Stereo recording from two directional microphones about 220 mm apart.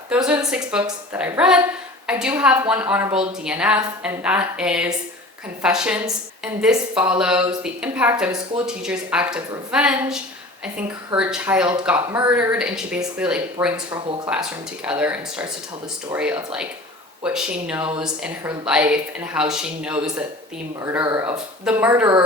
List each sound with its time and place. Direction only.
0.1 s a woman's voice: 5° right (ahead or behind)
21.0 s speech: 20° right (ahead or behind)
21.6 s speech: 5° right (ahead or behind)